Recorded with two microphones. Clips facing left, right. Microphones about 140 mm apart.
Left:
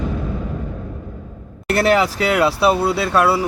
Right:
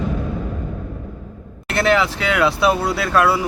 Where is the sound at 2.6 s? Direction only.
5° left (ahead or behind).